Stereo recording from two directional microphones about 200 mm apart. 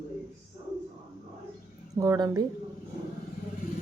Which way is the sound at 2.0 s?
20° right (ahead or behind).